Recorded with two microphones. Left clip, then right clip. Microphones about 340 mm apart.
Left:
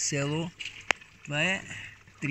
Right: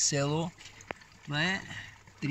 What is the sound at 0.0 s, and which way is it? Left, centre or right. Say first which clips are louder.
Speech: right 1 dB; centre.